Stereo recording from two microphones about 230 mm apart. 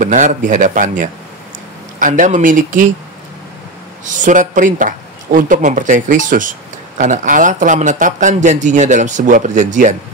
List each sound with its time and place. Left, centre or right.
0.0 s speech: right
4.0 s speech: right